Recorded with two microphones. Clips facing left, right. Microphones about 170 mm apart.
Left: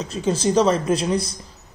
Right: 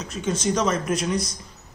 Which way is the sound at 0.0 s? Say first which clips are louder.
Left 4 dB; 30° left (ahead or behind).